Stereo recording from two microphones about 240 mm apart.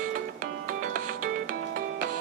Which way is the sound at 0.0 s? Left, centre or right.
Right.